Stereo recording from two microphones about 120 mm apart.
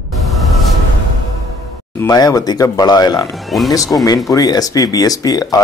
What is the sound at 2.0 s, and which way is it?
Speech, 30° left (ahead or behind).